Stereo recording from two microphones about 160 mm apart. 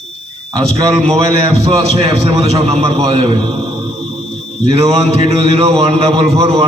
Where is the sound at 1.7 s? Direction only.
35° right (ahead or behind).